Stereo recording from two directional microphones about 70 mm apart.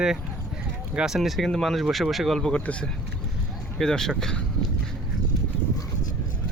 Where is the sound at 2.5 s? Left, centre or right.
Centre.